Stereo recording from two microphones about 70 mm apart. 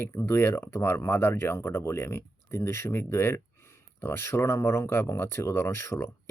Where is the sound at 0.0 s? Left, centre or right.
Left.